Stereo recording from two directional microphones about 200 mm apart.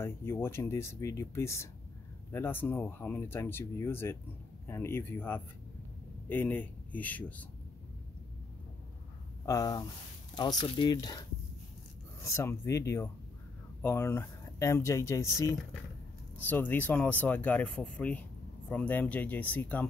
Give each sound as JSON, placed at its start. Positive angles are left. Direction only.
{"t": 0.0, "sound": "a man's voice", "side_deg": 10}
{"t": 9.5, "sound": "speech", "side_deg": 20}